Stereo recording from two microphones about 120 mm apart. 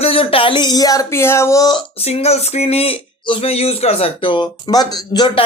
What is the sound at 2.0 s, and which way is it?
Speech, 60° left (ahead or behind).